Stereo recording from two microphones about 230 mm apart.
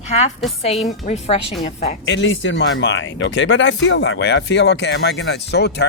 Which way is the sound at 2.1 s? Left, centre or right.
Left.